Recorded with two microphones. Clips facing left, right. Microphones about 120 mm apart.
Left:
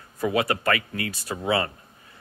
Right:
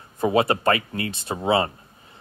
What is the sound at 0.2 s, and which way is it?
Speech, 30° right (ahead or behind).